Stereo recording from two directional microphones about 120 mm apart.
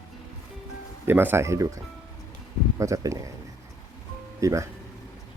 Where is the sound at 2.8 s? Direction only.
25° right (ahead or behind).